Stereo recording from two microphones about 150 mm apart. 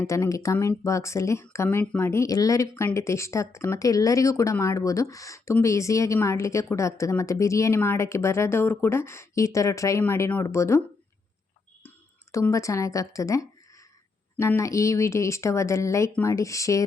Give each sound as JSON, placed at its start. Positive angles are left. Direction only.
{"t": 0.0, "sound": "speech", "side_deg": 20}
{"t": 12.3, "sound": "speech", "side_deg": 20}